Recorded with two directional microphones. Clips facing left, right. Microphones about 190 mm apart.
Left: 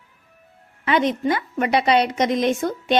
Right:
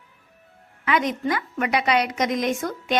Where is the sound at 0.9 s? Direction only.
30° left (ahead or behind).